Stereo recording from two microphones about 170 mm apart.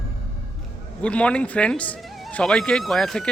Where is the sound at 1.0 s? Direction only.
5° left (ahead or behind).